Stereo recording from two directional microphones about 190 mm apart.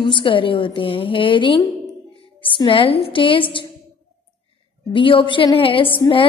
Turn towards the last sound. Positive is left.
turn(degrees=25)  # may be behind; listen again after turning